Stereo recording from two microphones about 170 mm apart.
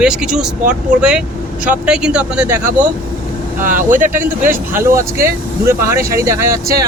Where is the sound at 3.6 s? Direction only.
50° right (ahead or behind).